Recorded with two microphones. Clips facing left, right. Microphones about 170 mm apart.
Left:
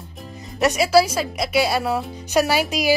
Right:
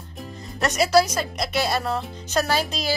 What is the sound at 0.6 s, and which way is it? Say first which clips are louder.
A woman's voice: left 3 dB; 5° left (ahead or behind).